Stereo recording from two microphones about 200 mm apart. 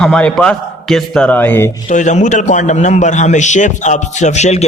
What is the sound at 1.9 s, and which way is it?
A man's voice, 35° left (ahead or behind).